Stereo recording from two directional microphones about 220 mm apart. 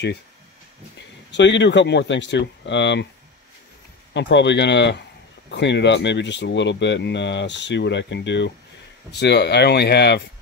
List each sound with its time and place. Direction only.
0.9 s speech: 55° left (ahead or behind)
4.1 s speech: 55° left (ahead or behind)